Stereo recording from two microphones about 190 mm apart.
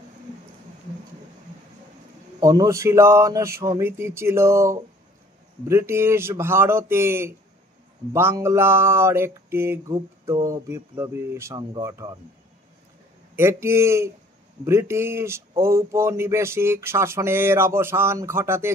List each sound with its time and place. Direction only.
2.4 s speech: 20° right (ahead or behind)
13.4 s speech: 15° right (ahead or behind)